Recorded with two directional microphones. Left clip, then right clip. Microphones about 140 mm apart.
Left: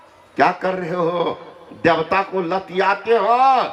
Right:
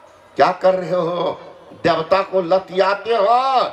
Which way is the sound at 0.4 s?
35° right (ahead or behind).